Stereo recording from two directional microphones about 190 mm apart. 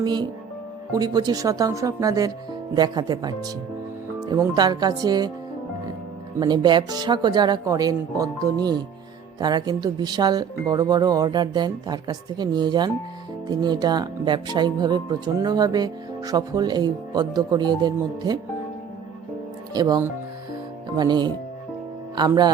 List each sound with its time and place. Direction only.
0.0 s speech: 20° right (ahead or behind)
6.4 s speech: 25° right (ahead or behind)
19.7 s speech: 20° right (ahead or behind)